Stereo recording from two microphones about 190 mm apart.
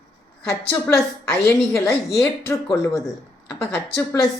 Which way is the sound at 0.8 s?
15° left (ahead or behind).